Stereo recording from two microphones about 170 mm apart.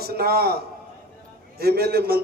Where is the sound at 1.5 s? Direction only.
65° right (ahead or behind).